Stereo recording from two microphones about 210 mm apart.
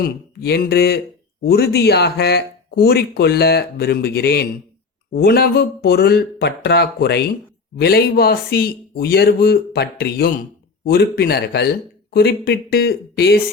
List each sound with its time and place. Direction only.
0.0 s a man's voice: 50° left (ahead or behind)